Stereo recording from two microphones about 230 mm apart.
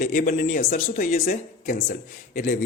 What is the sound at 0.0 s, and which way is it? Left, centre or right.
A man's voice, left.